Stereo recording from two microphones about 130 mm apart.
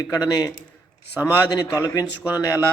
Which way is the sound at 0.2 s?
30° left (ahead or behind).